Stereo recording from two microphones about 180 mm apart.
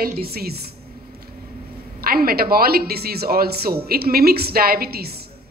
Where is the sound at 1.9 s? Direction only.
55° right (ahead or behind).